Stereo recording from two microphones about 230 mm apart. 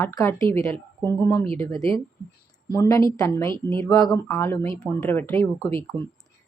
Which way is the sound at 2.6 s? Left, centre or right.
Centre.